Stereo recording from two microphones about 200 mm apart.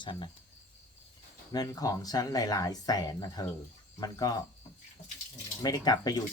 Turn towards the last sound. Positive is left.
turn(degrees=20)  # may be behind; listen again after turning